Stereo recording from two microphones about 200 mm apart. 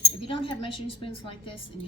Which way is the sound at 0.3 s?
25° left (ahead or behind).